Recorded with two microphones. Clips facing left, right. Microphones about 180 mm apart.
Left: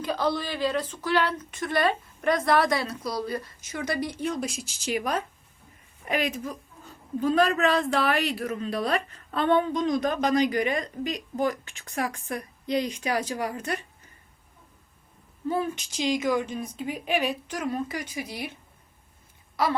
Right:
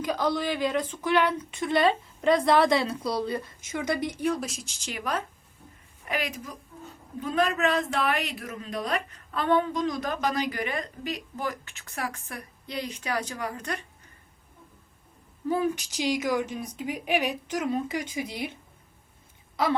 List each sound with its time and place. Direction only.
0.0 s a woman's voice: 15° right (ahead or behind)
4.4 s speech: centre (ahead or behind)
4.9 s a woman's voice: 15° left (ahead or behind)
7.2 s a woman's voice: 35° left (ahead or behind); by 13.7 s 10° left (ahead or behind)
15.4 s speech: 10° right (ahead or behind)